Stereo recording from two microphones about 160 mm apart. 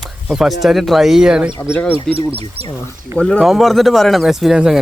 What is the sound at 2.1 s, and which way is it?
Speech, 35° right (ahead or behind).